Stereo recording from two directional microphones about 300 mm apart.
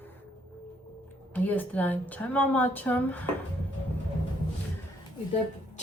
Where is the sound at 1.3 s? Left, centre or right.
Centre.